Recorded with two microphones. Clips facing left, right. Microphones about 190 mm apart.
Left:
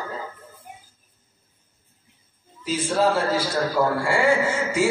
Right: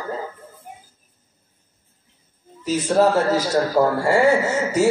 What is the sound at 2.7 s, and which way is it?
A man's voice, 40° right (ahead or behind).